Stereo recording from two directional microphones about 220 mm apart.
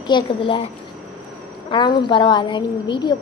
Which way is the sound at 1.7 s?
20° left (ahead or behind).